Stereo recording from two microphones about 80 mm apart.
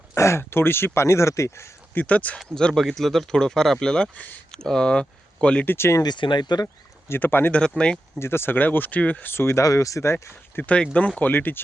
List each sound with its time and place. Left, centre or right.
0.1 s speech: left
2.0 s speech: centre
5.6 s speech: left
6.0 s speech: left
7.1 s speech: left
7.8 s speech: centre
8.2 s speech: left
9.6 s speech: left
10.6 s speech: centre